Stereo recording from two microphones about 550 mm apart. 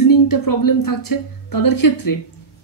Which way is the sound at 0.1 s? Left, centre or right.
Left.